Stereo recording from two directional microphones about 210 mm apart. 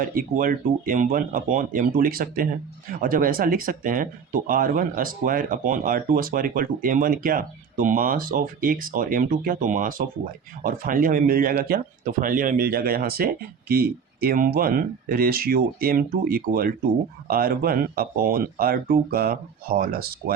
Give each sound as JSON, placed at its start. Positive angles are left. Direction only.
{"t": 0.0, "sound": "speech", "side_deg": -40}